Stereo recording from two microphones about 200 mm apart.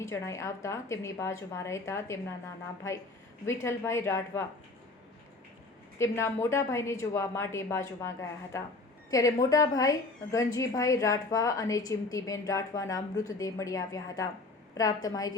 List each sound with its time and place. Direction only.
0.0 s a woman's voice: 15° left (ahead or behind)
3.4 s a woman's voice: 15° left (ahead or behind)
6.0 s a woman's voice: 15° left (ahead or behind)